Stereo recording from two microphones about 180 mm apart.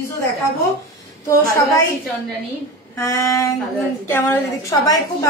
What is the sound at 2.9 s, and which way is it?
A woman's voice, 15° left (ahead or behind).